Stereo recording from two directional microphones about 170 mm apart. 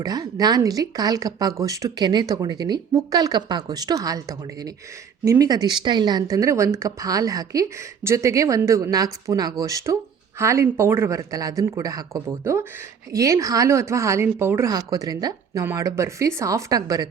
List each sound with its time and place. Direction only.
0.0 s speech: 20° right (ahead or behind)